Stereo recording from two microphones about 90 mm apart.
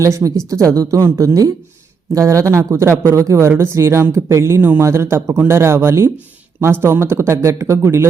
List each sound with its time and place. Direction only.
0.0 s speech: 35° right (ahead or behind)